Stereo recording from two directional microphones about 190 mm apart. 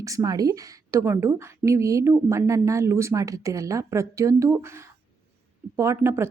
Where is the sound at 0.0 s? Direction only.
15° right (ahead or behind).